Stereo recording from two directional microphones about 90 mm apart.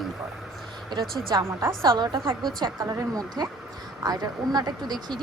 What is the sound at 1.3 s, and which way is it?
A woman's voice, 50° right (ahead or behind).